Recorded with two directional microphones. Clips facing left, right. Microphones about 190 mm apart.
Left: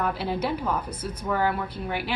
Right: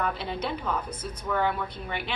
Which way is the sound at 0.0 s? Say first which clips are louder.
Left 3 dB; 5° left (ahead or behind).